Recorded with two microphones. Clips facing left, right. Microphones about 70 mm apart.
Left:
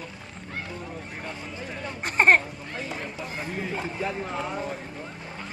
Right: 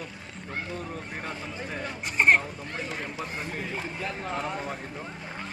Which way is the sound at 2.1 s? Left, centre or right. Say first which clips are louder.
Left 2 dB; left.